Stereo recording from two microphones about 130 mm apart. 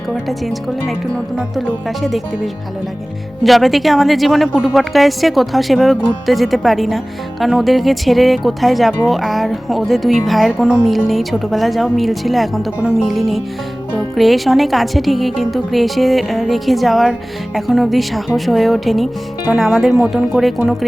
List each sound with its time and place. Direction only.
0.3 s a woman's voice: centre (ahead or behind)
3.4 s a woman's voice: centre (ahead or behind)